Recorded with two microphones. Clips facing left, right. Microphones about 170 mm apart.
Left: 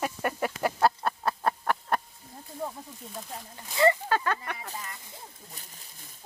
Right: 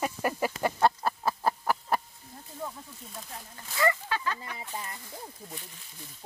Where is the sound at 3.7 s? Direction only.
25° left (ahead or behind).